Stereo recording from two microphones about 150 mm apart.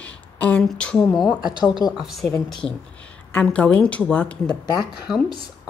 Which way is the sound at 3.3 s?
10° left (ahead or behind).